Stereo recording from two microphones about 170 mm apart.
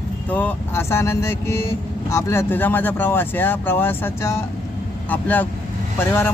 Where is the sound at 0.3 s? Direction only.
10° left (ahead or behind).